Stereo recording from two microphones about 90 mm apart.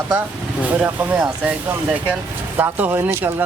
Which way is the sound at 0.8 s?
20° right (ahead or behind).